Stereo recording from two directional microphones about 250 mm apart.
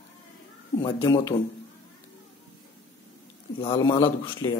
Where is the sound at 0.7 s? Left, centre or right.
Centre.